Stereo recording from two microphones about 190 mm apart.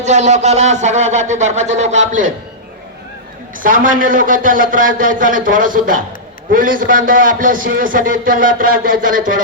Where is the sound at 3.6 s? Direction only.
45° right (ahead or behind).